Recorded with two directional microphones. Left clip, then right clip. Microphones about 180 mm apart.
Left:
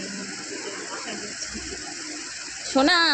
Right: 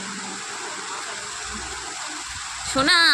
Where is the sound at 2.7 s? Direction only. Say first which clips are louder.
Right 2 dB; 20° left (ahead or behind).